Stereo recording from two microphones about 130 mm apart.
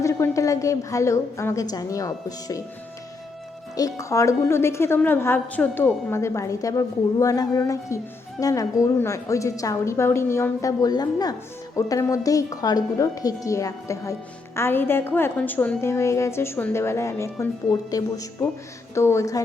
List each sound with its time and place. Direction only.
0.0 s a woman's voice: 25° left (ahead or behind)
3.8 s a woman's voice: 25° left (ahead or behind)